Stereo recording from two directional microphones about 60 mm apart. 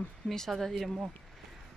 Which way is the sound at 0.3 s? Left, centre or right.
Centre.